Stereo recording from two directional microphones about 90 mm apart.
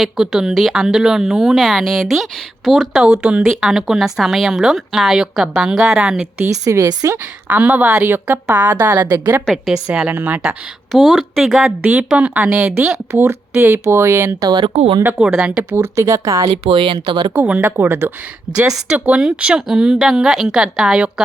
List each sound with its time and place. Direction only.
0.0 s speech: 5° right (ahead or behind)
6.5 s speech: 35° right (ahead or behind)
7.4 s a woman's voice: 20° right (ahead or behind)
9.5 s speech: centre (ahead or behind)
10.9 s speech: 5° right (ahead or behind)
13.1 s a woman's voice: 30° right (ahead or behind)
14.4 s speech: 50° right (ahead or behind)
15.0 s speech: 10° right (ahead or behind)
15.7 s speech: 30° right (ahead or behind)
16.6 s speech: 60° right (ahead or behind)
17.3 s speech: 15° right (ahead or behind)